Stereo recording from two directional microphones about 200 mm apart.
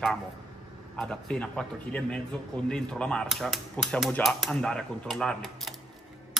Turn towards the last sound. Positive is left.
turn(degrees=0)  # may be behind; listen again after turning